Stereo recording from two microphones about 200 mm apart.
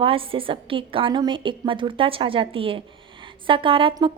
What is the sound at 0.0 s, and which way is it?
A woman's voice, 25° right (ahead or behind).